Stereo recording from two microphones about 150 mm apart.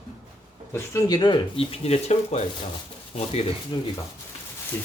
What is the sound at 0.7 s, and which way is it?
Speech, 20° left (ahead or behind).